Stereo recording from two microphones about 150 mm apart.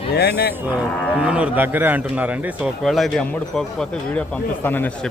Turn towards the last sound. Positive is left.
turn(degrees=10)  # may be behind; listen again after turning